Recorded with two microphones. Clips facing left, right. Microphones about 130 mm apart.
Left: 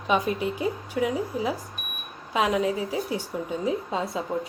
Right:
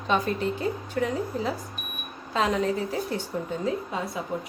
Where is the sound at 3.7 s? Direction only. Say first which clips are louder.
Left 2 dB; 25° left (ahead or behind).